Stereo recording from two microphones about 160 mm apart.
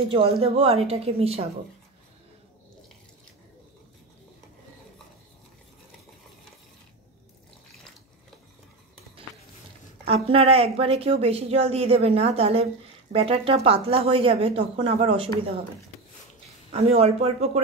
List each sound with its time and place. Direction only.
0.0 s a woman's voice: 35° right (ahead or behind)
10.0 s a woman's voice: 35° right (ahead or behind)
16.7 s a woman's voice: 40° right (ahead or behind)